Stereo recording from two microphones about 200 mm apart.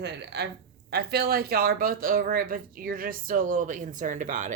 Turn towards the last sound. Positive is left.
turn(degrees=-40)  # may be behind; listen again after turning